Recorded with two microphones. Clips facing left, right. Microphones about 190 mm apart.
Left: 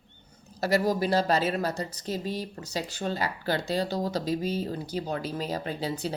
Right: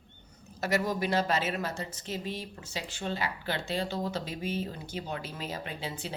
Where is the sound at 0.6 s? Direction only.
35° left (ahead or behind).